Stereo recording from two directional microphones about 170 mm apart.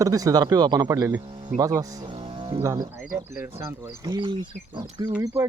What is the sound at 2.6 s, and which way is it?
Speech, 20° right (ahead or behind).